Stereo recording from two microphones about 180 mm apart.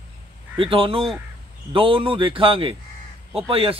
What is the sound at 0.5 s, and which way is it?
A man's voice, 30° right (ahead or behind).